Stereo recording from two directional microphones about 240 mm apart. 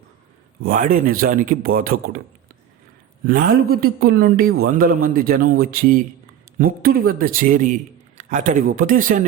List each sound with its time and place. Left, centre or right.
0.6 s speech: right
3.2 s speech: right